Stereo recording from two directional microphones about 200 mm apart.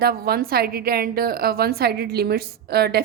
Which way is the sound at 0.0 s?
50° right (ahead or behind).